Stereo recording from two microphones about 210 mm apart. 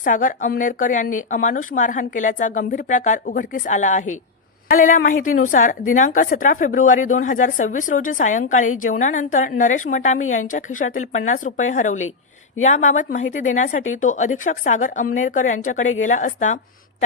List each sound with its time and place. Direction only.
0.0 s speech: 40° left (ahead or behind)